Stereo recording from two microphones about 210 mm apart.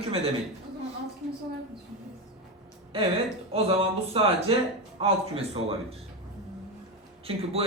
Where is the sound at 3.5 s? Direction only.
30° right (ahead or behind).